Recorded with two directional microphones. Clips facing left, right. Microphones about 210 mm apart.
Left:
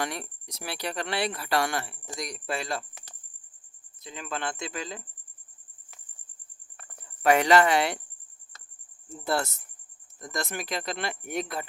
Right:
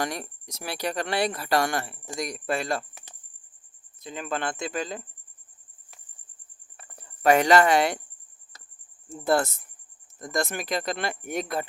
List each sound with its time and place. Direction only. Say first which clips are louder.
0.0 s speech: right 2 dB; 40° right (ahead or behind)
4.0 s speech: right 4 dB; 50° right (ahead or behind)
6.7 s a sound: right 1 dB; 35° right (ahead or behind)
9.0 s speech: right 5 dB; 50° right (ahead or behind)